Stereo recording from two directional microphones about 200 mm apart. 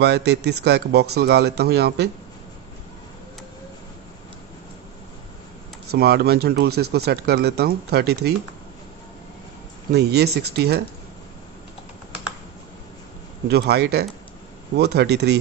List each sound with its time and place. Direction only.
0.0 s speech: 55° right (ahead or behind)
5.9 s speech: 55° right (ahead or behind)
9.9 s speech: 55° right (ahead or behind)
13.5 s speech: 55° right (ahead or behind)